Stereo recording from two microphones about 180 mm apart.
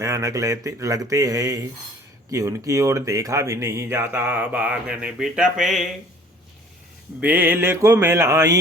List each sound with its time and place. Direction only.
0.0 s speech: 15° right (ahead or behind); by 5.8 s centre (ahead or behind)
7.2 s speech: 10° right (ahead or behind)